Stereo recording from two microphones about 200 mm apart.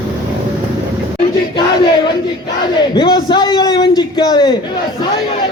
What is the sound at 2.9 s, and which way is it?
A man's voice, 20° left (ahead or behind).